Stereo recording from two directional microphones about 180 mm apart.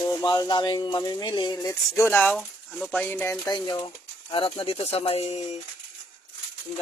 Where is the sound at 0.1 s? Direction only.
20° left (ahead or behind); by 5.5 s 35° left (ahead or behind).